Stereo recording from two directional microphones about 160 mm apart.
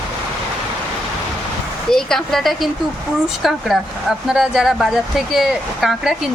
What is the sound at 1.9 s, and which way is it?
Speech, centre (ahead or behind).